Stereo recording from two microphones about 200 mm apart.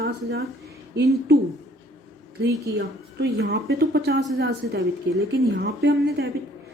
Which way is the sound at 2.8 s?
60° right (ahead or behind).